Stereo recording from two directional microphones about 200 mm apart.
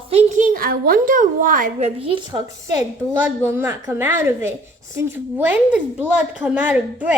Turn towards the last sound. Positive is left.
turn(degrees=-10)  # may be behind; listen again after turning